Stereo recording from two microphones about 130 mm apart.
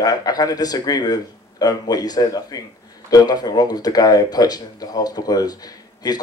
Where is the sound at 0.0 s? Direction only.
30° left (ahead or behind).